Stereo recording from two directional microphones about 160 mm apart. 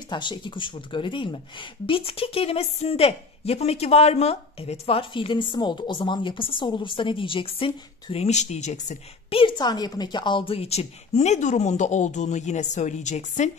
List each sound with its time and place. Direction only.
0.1 s speech: 30° left (ahead or behind); by 9.4 s 45° left (ahead or behind)
9.4 s a woman's voice: 25° left (ahead or behind); by 13.5 s 45° left (ahead or behind)